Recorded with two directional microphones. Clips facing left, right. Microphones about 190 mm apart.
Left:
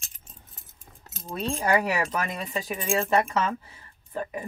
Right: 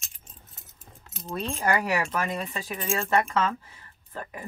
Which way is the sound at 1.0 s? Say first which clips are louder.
Even; 40° left (ahead or behind).